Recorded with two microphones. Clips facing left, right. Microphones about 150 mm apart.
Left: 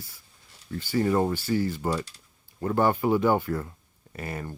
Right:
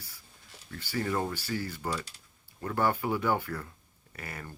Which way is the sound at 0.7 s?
25° left (ahead or behind).